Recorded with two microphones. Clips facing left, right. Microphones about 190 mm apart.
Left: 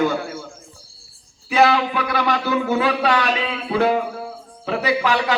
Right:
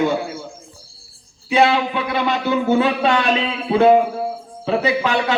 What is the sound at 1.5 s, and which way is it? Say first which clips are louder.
A man's voice: right 1 dB; 25° right (ahead or behind).